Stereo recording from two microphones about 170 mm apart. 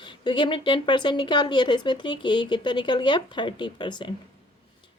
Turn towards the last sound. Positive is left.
turn(degrees=25)  # may be behind; listen again after turning